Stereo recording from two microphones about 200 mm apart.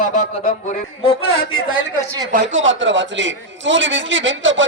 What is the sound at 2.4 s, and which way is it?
A man's voice, 70° right (ahead or behind).